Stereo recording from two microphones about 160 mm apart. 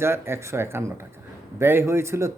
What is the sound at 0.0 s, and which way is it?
Speech, 15° right (ahead or behind).